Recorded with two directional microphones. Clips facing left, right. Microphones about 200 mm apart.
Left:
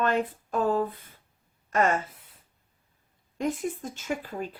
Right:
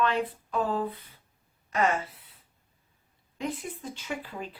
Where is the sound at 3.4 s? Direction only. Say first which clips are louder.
Left 5 dB; 45° left (ahead or behind).